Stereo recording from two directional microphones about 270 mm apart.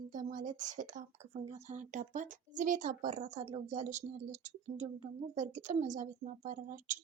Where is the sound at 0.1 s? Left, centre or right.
Right.